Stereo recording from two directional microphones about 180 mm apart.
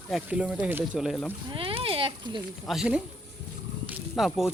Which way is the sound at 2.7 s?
5° right (ahead or behind).